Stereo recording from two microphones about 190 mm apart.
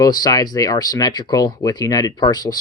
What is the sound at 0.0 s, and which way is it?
Speech, 20° left (ahead or behind).